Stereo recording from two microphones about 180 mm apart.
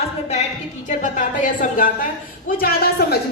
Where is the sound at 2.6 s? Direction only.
60° left (ahead or behind).